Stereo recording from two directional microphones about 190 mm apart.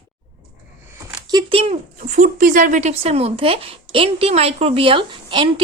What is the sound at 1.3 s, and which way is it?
Speech, 30° right (ahead or behind).